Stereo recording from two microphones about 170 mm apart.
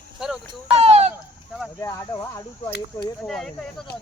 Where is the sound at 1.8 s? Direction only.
20° left (ahead or behind).